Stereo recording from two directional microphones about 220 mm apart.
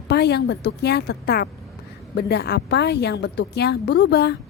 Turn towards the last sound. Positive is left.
turn(degrees=50)  # may be behind; listen again after turning